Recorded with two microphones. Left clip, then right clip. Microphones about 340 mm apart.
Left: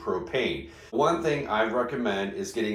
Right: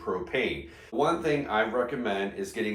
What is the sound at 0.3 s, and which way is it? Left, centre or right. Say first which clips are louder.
Speech: left 1 dB; centre.